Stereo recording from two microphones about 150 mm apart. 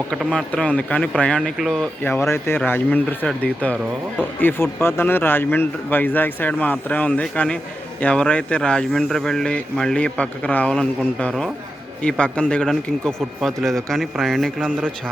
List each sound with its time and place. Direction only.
0.1 s speech: centre (ahead or behind)
2.0 s speech: 15° left (ahead or behind)